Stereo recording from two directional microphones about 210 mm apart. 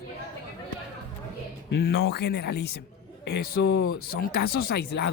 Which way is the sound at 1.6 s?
50° left (ahead or behind).